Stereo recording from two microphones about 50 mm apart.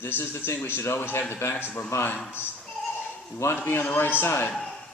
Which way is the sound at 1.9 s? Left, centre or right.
Left.